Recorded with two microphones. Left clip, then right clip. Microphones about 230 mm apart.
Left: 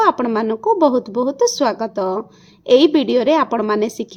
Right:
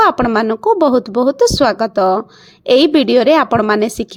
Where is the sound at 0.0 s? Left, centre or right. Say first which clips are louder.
Right 4 dB; right.